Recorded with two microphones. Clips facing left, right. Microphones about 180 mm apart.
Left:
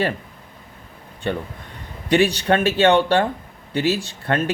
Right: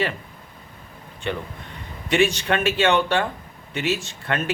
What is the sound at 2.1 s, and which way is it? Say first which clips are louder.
Speech: left 3 dB; 35° left (ahead or behind).